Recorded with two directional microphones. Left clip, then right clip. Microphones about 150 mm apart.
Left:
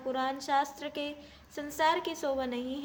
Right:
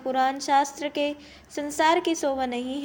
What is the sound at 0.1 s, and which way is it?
A woman's voice, 25° right (ahead or behind).